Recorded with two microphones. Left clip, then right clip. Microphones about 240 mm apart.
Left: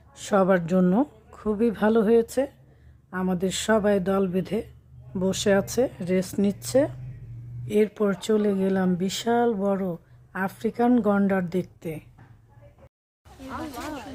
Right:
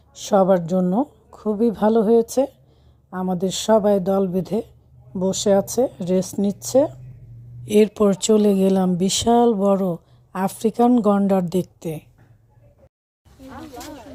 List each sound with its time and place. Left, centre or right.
0.2 s speech: centre
0.8 s speech: centre
1.5 s speech: centre